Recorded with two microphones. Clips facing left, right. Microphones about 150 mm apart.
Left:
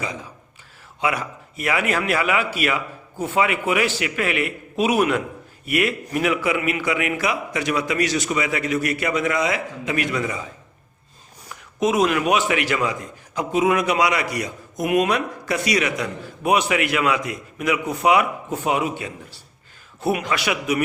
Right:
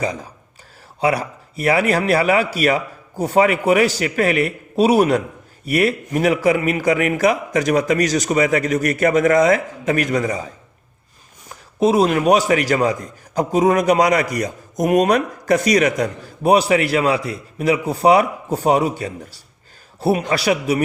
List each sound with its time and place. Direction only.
0.0 s a man's voice: 40° right (ahead or behind)
11.4 s a man's voice: 35° right (ahead or behind)